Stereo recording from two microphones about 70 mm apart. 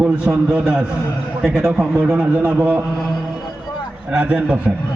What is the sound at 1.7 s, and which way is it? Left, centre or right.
Speech, centre.